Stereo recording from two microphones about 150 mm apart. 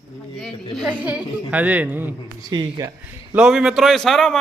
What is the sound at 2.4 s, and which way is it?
Speech, 30° right (ahead or behind).